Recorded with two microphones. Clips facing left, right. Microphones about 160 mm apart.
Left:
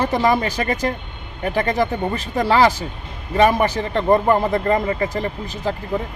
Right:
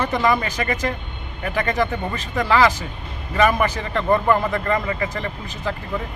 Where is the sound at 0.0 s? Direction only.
35° left (ahead or behind).